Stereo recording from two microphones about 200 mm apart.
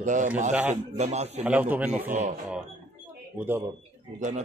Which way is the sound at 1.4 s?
5° right (ahead or behind).